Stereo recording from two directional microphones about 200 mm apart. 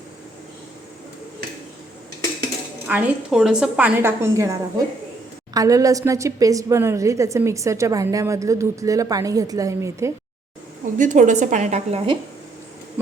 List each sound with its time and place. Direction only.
2.8 s a woman's voice: 5° right (ahead or behind)
5.5 s a woman's voice: 15° right (ahead or behind)
10.9 s a woman's voice: 40° right (ahead or behind)